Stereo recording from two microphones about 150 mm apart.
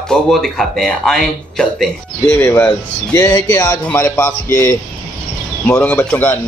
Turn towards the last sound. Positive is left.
turn(degrees=10)  # may be behind; listen again after turning